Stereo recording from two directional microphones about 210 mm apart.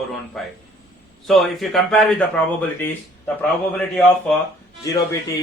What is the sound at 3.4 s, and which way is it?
Speech, 5° left (ahead or behind).